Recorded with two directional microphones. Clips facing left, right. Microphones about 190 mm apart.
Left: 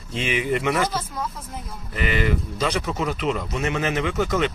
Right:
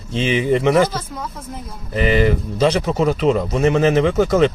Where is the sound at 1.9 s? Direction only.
35° right (ahead or behind).